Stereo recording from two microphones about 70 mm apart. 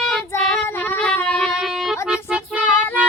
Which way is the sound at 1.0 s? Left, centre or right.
Centre.